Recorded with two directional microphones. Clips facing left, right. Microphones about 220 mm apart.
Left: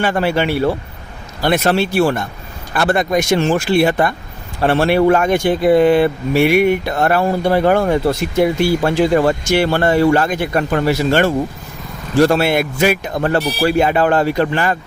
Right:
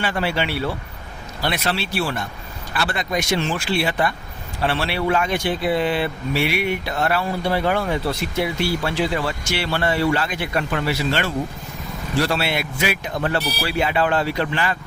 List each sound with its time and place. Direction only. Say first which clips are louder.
0.0 s speech: left 7 dB; 50° left (ahead or behind)